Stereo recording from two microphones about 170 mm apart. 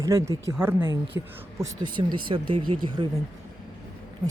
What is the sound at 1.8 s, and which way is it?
Speech, 25° right (ahead or behind).